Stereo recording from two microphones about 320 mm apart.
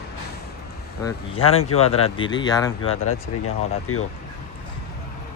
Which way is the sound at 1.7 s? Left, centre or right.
Left.